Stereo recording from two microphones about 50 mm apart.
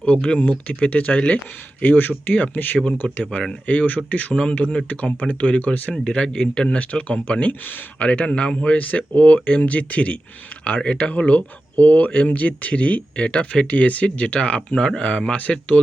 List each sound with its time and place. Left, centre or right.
0.0 s speech: left
1.8 s speech: left
3.0 s speech: left
3.5 s speech: left
5.9 s speech: centre